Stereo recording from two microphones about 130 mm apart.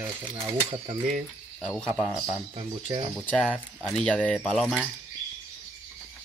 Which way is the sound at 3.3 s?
10° left (ahead or behind).